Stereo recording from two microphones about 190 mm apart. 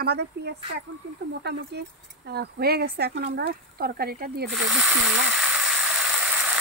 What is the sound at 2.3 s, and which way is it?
Speech, 55° right (ahead or behind).